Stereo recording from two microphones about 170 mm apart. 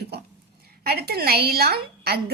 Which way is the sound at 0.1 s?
70° right (ahead or behind).